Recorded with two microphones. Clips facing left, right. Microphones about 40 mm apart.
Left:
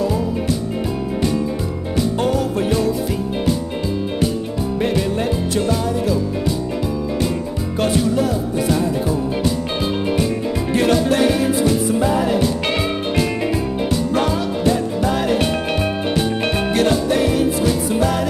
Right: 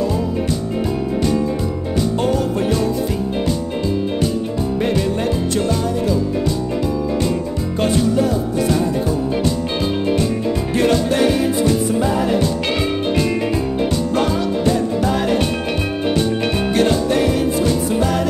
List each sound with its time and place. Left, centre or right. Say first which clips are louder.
2.0 s music: even; centre
4.7 s music: even; centre
7.8 s music: right 1 dB; centre
16.7 s music: right 1 dB; centre